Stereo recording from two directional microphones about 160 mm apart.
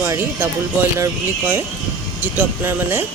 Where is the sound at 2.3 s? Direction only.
15° right (ahead or behind).